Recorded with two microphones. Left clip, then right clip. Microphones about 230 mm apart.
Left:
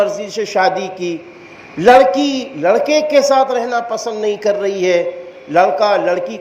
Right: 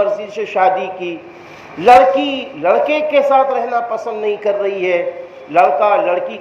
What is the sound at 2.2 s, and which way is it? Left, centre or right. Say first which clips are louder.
Speech: left 1 dB; left.